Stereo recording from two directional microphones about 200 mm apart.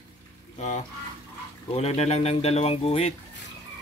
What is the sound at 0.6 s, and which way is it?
Speech, 35° left (ahead or behind).